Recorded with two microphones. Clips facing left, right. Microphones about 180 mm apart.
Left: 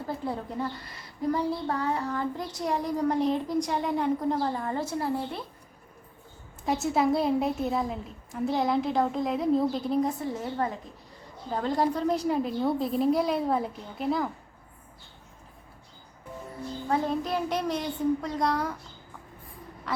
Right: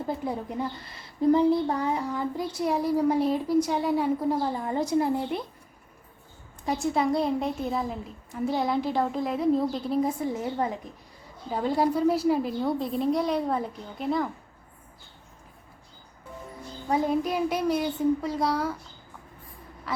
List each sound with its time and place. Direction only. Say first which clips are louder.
0.3 s child singing: right 1 dB; 15° right (ahead or behind)
0.9 s child singing: right 7 dB; 25° right (ahead or behind)
6.7 s a woman's voice: even; centre (ahead or behind)
10.2 s child singing: right 2 dB; 15° right (ahead or behind)
11.4 s a woman's voice: right 2 dB; 10° right (ahead or behind)
16.9 s child singing: right 3 dB; 10° right (ahead or behind)